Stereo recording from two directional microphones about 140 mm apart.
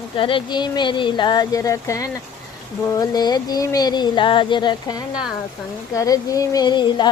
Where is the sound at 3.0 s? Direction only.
30° left (ahead or behind).